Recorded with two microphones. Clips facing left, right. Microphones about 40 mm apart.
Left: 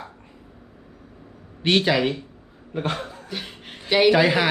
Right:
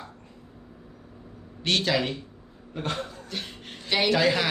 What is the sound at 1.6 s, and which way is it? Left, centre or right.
A man's voice, centre.